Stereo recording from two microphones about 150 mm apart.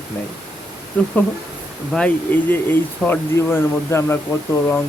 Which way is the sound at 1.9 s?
5° left (ahead or behind).